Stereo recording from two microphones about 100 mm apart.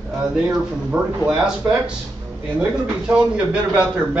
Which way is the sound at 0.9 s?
10° right (ahead or behind).